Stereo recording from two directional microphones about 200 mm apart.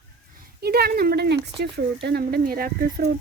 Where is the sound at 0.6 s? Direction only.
50° right (ahead or behind).